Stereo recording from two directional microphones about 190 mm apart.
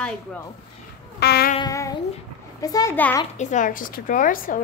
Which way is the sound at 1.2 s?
60° left (ahead or behind).